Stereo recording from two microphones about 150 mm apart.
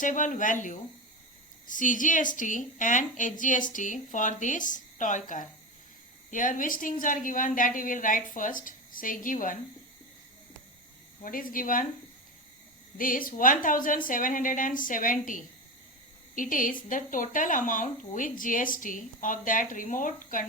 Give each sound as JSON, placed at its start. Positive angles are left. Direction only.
{"t": 0.0, "sound": "speech", "side_deg": 60}
{"t": 11.2, "sound": "speech", "side_deg": 65}
{"t": 13.0, "sound": "speech", "side_deg": 65}